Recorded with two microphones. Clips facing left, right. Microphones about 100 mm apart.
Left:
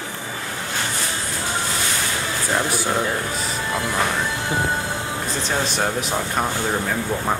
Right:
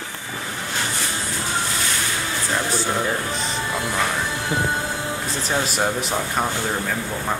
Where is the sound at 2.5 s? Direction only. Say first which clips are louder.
Left 2 dB; 10° left (ahead or behind).